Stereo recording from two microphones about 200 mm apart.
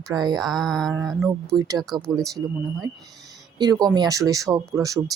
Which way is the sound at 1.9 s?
Centre (ahead or behind).